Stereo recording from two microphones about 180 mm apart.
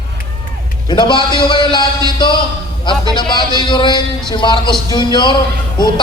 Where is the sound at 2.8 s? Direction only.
25° left (ahead or behind).